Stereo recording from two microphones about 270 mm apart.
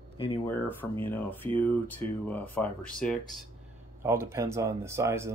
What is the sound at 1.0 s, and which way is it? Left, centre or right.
Speech, centre.